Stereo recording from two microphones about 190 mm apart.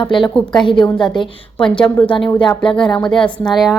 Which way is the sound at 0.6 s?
25° left (ahead or behind).